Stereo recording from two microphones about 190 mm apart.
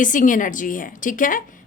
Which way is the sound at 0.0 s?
45° left (ahead or behind).